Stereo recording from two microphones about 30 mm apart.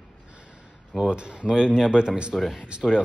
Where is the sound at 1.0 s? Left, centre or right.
Right.